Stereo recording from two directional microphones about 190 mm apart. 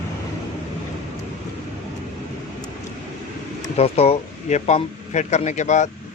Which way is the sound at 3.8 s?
35° left (ahead or behind).